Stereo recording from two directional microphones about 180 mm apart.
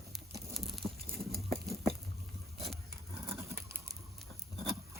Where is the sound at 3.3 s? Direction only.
15° right (ahead or behind).